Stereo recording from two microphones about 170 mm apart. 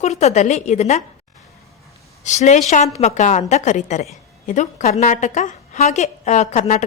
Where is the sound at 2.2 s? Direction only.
45° left (ahead or behind).